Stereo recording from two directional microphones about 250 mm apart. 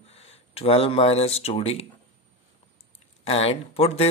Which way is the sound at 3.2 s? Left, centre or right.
Left.